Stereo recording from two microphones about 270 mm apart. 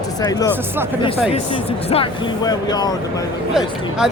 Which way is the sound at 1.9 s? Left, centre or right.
Centre.